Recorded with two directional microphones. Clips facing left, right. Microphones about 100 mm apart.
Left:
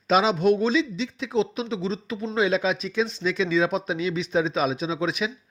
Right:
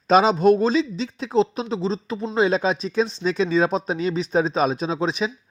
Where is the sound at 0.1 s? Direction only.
40° right (ahead or behind).